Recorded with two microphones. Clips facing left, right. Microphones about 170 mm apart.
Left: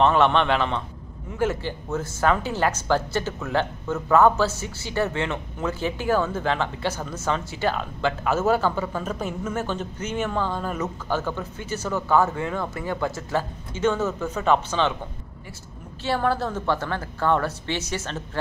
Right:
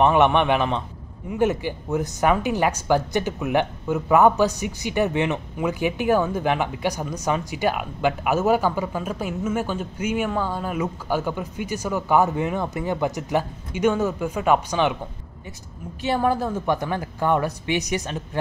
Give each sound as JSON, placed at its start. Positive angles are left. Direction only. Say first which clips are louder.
{"t": 0.0, "sound": "speech", "louder": "right 2 dB", "side_deg": -15}
{"t": 16.0, "sound": "speech", "louder": "right 2 dB", "side_deg": -15}